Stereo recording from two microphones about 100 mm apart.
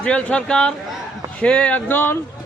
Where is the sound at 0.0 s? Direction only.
10° left (ahead or behind).